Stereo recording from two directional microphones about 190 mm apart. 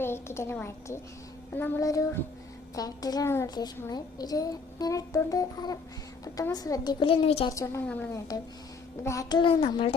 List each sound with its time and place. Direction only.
0.0 s a woman's voice: 15° left (ahead or behind); by 7.5 s 30° left (ahead or behind)
7.5 s a woman's voice: 15° left (ahead or behind)